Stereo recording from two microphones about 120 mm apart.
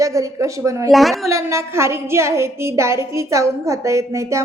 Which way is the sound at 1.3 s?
25° right (ahead or behind).